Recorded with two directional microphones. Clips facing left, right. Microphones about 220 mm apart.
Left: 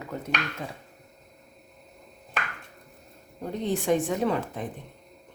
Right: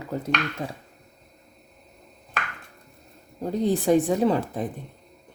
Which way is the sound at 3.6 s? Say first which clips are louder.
Right 5 dB; 35° right (ahead or behind).